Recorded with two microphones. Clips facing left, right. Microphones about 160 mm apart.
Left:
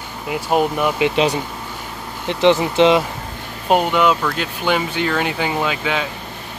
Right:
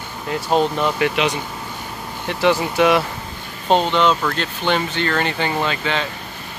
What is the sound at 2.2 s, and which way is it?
Speech, 20° left (ahead or behind).